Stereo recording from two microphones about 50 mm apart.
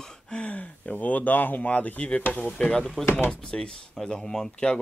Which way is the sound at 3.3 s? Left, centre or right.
Centre.